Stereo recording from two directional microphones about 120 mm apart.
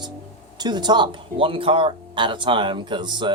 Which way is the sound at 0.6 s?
35° right (ahead or behind).